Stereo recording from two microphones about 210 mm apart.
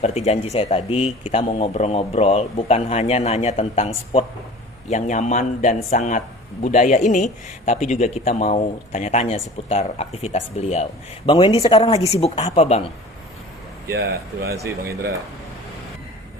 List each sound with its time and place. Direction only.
0.0 s a man's voice: 30° left (ahead or behind)
13.9 s speech: 50° right (ahead or behind)